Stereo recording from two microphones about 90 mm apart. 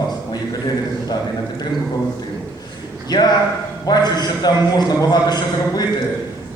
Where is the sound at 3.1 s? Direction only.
50° left (ahead or behind).